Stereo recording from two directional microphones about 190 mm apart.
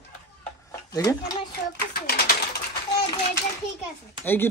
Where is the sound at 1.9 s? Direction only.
55° left (ahead or behind).